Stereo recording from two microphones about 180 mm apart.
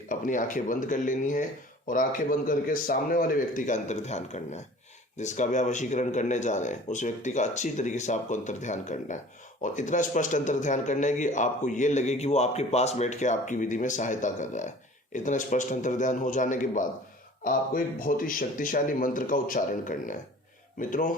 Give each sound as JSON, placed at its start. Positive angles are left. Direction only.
{"t": 0.1, "sound": "speech", "side_deg": 45}